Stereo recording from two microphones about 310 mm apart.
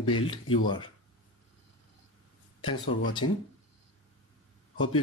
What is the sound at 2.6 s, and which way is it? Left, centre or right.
Speech, centre.